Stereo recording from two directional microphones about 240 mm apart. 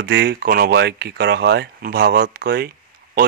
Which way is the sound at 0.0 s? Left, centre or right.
Right.